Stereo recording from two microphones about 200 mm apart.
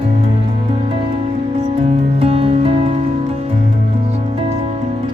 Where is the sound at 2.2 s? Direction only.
30° right (ahead or behind).